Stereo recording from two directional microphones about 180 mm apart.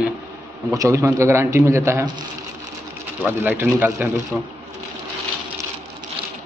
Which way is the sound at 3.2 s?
10° right (ahead or behind).